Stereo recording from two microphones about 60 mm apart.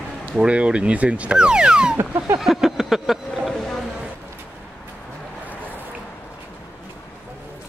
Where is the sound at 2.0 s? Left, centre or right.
Right.